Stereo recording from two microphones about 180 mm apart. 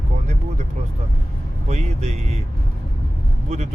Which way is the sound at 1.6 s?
35° right (ahead or behind).